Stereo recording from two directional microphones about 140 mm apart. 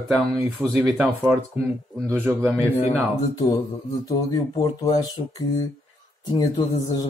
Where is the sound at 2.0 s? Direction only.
15° right (ahead or behind).